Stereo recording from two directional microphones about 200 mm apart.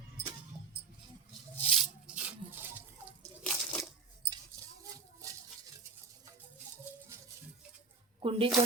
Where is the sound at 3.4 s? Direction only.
5° left (ahead or behind).